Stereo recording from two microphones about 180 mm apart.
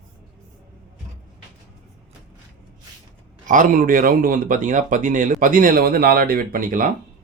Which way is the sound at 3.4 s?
45° right (ahead or behind).